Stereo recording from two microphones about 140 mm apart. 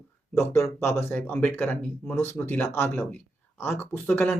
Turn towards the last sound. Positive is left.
turn(degrees=15)  # may be behind; listen again after turning